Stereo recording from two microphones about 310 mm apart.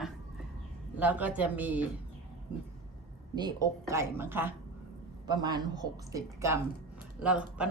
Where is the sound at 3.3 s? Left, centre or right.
Centre.